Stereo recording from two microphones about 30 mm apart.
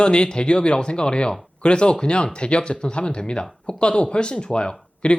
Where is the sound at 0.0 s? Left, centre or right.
Left.